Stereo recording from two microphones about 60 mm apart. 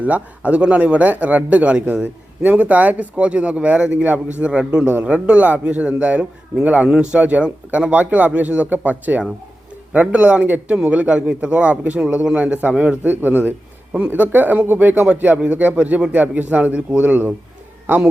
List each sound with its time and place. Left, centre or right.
0.0 s a man's voice: right